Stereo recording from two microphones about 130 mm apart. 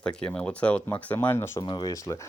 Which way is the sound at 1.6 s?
35° left (ahead or behind).